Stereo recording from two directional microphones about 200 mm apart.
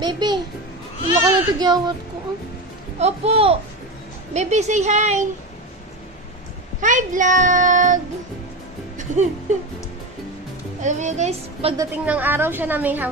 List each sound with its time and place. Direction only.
0.0 s a sound: 20° right (ahead or behind)
1.1 s speech: 20° right (ahead or behind)
3.0 s speech: 30° right (ahead or behind)
6.8 s a child's voice: 40° right (ahead or behind)
8.9 s music: 35° right (ahead or behind)
10.8 s speech: 35° right (ahead or behind)
11.7 s a woman's voice: 10° right (ahead or behind)